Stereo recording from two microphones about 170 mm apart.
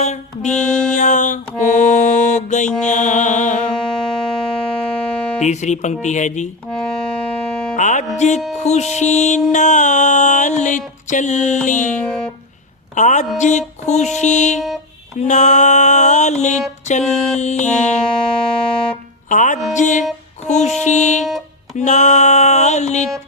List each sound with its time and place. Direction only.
0.0 s music: 40° left (ahead or behind)
0.9 s mantra: 45° left (ahead or behind)
2.8 s music: 45° left (ahead or behind)
3.8 s music: 5° left (ahead or behind)
5.4 s music: 45° left (ahead or behind)
6.7 s music: 5° left (ahead or behind)
7.8 s music: 45° left (ahead or behind)
12.0 s music: 5° left (ahead or behind)
12.9 s a woman's voice: 45° left (ahead or behind)
13.3 s music: 45° left (ahead or behind)
18.1 s music: 5° left (ahead or behind)
19.3 s music: 50° left (ahead or behind)